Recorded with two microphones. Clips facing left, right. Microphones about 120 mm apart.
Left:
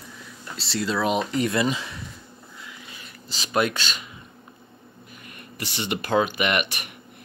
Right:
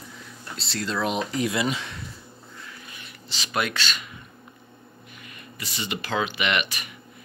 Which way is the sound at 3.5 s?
35° left (ahead or behind).